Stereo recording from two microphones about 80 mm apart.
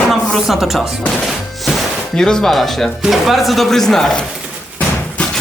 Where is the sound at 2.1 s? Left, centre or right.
Centre.